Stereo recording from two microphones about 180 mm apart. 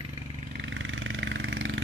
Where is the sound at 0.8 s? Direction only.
90° right.